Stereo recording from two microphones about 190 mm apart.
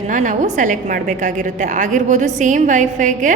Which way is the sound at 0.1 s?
40° right (ahead or behind).